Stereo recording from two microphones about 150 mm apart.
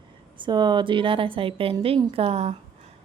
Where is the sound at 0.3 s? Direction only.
30° right (ahead or behind).